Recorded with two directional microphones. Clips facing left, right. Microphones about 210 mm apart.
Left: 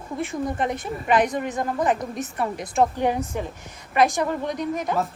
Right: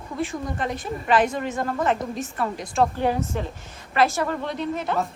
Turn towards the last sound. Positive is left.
turn(degrees=15)  # may be behind; listen again after turning